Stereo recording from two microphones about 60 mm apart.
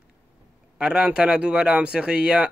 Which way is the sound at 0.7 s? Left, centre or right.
Centre.